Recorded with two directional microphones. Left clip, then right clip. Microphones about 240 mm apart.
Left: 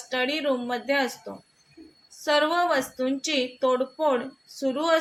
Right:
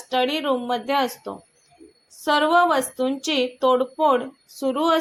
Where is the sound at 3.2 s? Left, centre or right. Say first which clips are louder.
Right 4 dB; centre.